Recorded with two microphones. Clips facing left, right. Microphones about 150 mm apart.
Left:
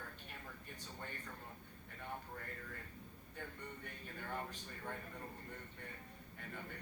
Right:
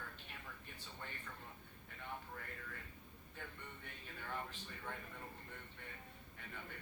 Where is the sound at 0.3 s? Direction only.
45° left (ahead or behind).